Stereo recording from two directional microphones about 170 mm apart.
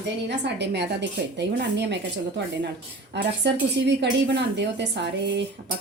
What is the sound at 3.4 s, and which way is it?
A woman's voice, 90° right.